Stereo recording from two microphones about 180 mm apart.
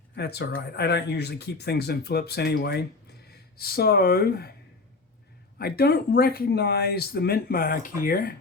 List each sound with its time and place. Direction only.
0.2 s speech: 65° left (ahead or behind)
5.5 s speech: 60° left (ahead or behind)